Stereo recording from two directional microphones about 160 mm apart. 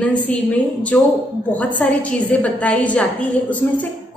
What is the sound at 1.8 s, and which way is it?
A woman's voice, 10° left (ahead or behind).